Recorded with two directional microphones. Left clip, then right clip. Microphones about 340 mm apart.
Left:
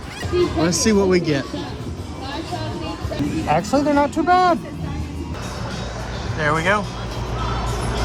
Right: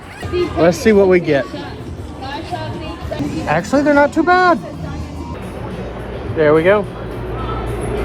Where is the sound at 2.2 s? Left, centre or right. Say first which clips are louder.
Right 4 dB; left.